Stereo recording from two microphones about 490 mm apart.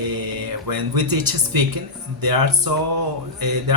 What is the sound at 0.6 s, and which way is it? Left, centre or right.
Speech, right.